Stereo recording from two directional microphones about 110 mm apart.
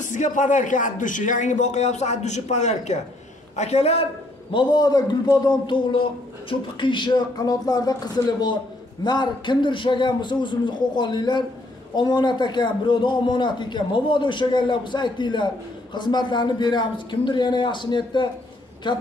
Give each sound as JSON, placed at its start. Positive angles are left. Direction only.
{"t": 0.0, "sound": "a man's voice", "side_deg": 90}
{"t": 4.5, "sound": "a man's voice", "side_deg": 45}